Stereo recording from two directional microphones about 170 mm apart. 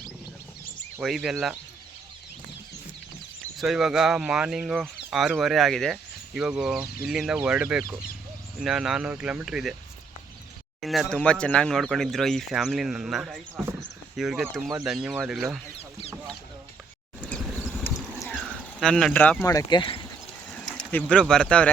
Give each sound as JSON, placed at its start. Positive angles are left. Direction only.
{"t": 0.9, "sound": "speech", "side_deg": -5}
{"t": 3.6, "sound": "speech", "side_deg": 0}
{"t": 10.8, "sound": "speech", "side_deg": 0}
{"t": 13.6, "sound": "a sound", "side_deg": -15}
{"t": 14.2, "sound": "speech", "side_deg": 0}
{"t": 18.3, "sound": "speech", "side_deg": 5}
{"t": 20.5, "sound": "speech", "side_deg": 5}